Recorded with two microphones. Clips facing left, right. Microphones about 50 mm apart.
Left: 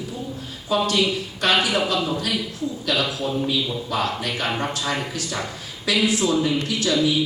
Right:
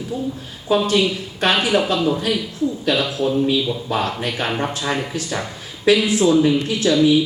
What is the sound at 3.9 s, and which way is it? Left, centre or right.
Speech, right.